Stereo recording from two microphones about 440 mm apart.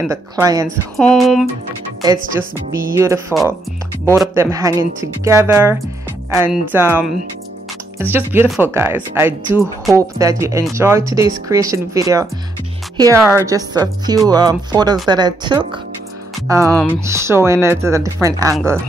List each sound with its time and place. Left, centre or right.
0.0 s speech: centre
2.0 s speech: centre
3.0 s speech: centre